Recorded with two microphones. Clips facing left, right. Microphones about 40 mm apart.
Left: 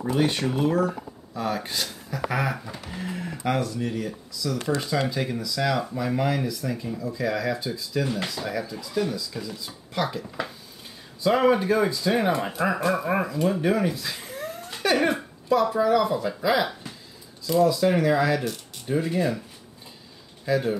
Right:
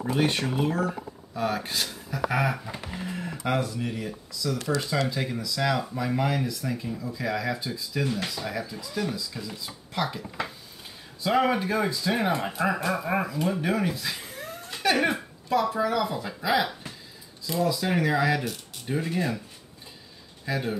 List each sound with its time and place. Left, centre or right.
0.0 s speech: centre
6.9 s speech: centre
7.2 s speech: centre
20.4 s speech: centre